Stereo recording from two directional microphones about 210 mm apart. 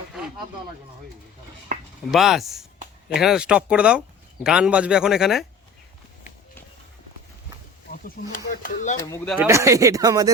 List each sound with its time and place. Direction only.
2.0 s a man's voice: centre (ahead or behind)
7.9 s a sound: 40° left (ahead or behind)
9.2 s a man's voice: centre (ahead or behind)
9.5 s speech: 15° right (ahead or behind)